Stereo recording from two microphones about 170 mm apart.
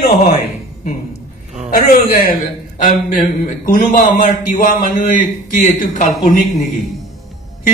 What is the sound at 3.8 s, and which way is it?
A man's voice, 50° left (ahead or behind).